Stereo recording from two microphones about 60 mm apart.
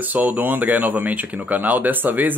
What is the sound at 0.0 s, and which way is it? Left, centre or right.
Speech, right.